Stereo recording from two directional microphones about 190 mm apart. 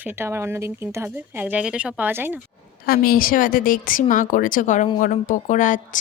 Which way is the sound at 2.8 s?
50° left (ahead or behind).